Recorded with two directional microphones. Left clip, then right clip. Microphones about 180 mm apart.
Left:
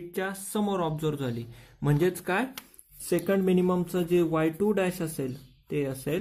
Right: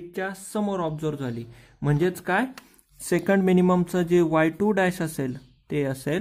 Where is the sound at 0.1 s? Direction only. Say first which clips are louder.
Right 2 dB; 10° right (ahead or behind).